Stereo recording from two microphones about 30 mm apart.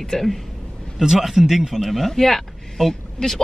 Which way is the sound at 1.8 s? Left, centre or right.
Centre.